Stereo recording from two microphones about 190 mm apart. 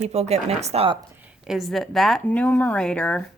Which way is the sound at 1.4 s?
Centre (ahead or behind).